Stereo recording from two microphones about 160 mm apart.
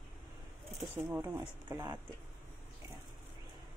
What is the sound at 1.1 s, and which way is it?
Speech, 15° right (ahead or behind).